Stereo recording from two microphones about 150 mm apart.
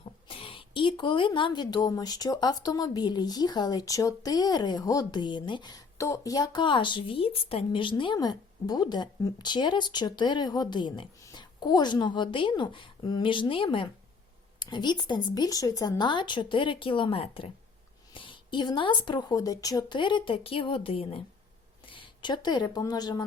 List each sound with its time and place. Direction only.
0.3 s a woman's voice: 35° left (ahead or behind)